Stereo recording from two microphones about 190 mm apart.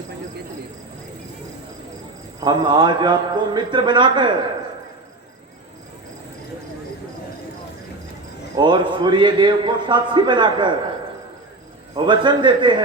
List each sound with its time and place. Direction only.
2.4 s a man's voice: 25° right (ahead or behind)
8.5 s a man's voice: 25° right (ahead or behind)
11.9 s a man's voice: 25° right (ahead or behind)